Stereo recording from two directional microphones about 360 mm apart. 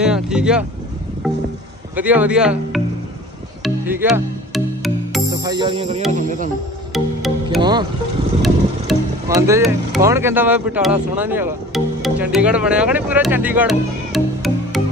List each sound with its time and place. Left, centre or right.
0.0 s speech: centre
2.0 s speech: centre
3.6 s music: centre
5.4 s music: centre
6.1 s speech: right
6.9 s music: centre
8.4 s speech: centre